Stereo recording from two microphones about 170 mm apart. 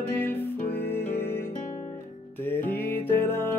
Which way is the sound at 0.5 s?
70° left (ahead or behind).